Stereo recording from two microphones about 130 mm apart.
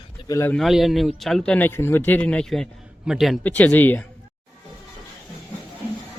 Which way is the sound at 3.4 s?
15° left (ahead or behind).